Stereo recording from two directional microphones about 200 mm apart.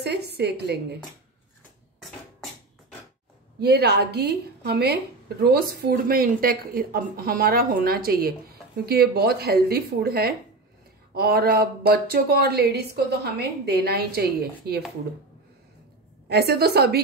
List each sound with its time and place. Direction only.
0.0 s a woman's voice: 55° right (ahead or behind)
3.5 s speech: 55° right (ahead or behind)
16.3 s speech: 55° right (ahead or behind)